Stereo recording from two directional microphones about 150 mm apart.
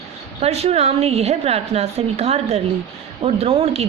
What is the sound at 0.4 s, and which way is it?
A woman's voice, 45° right (ahead or behind).